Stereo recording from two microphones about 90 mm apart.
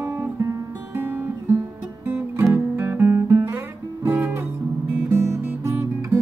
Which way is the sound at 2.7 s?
25° right (ahead or behind).